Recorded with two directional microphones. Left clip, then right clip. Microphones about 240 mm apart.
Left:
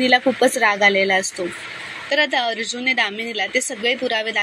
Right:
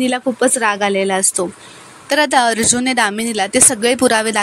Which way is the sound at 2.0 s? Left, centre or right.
Right.